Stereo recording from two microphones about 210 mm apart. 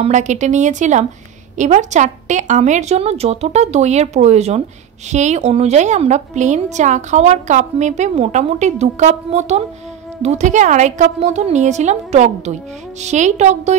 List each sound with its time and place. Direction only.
0.0 s a woman's voice: 35° right (ahead or behind)